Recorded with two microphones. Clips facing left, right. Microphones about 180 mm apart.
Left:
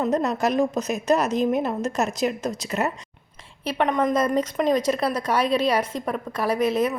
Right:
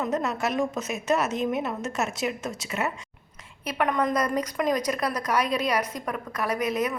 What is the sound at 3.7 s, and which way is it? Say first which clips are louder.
Speech: left 3 dB; 25° left (ahead or behind).